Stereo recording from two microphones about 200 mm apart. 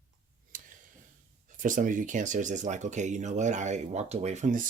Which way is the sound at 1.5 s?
40° right (ahead or behind).